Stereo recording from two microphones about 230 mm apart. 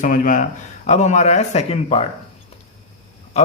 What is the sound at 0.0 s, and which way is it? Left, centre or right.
Speech, left.